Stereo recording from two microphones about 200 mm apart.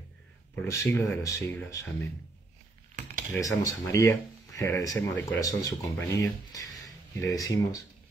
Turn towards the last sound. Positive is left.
turn(degrees=15)  # may be behind; listen again after turning